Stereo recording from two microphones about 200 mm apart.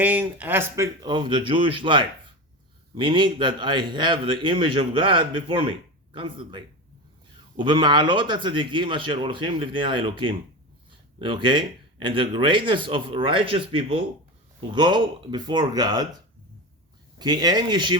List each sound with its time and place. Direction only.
0.0 s speech: 10° right (ahead or behind)
1.0 s a man's voice: 20° right (ahead or behind)
17.2 s a man's voice: 20° right (ahead or behind)